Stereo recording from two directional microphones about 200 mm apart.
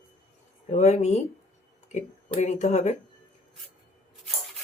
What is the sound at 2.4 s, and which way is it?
Speech, 35° left (ahead or behind).